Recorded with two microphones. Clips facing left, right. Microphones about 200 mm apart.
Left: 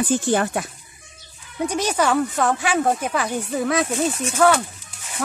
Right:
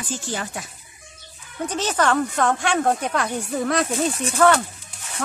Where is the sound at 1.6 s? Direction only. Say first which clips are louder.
Left 1 dB; 10° left (ahead or behind).